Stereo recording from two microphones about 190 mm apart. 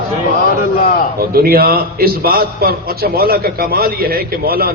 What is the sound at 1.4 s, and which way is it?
A man's voice, 50° right (ahead or behind).